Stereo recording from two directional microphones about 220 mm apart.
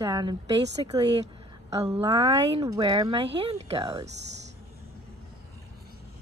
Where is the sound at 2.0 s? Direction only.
15° right (ahead or behind).